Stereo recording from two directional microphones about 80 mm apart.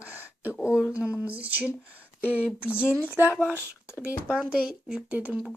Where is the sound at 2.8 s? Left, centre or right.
Left.